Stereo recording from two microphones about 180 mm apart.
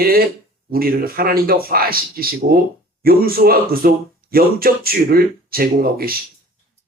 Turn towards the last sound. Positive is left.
turn(degrees=-55)  # may be behind; listen again after turning